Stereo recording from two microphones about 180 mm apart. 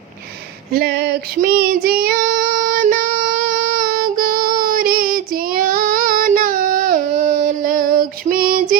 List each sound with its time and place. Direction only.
0.7 s child singing: 60° right (ahead or behind); by 7.3 s 45° right (ahead or behind)
7.3 s female singing: 50° right (ahead or behind)